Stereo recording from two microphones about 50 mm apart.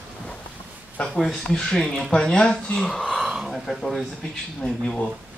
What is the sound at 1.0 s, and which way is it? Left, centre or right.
Speech, left.